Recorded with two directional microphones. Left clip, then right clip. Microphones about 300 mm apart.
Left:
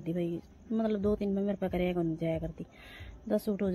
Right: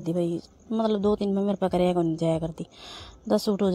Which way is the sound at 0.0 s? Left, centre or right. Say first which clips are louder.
Right 7 dB; centre.